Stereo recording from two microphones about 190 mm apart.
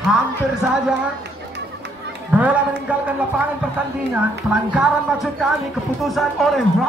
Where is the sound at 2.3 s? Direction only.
5° right (ahead or behind).